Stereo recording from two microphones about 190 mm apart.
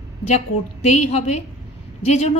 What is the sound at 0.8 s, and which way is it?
Speech, 35° left (ahead or behind).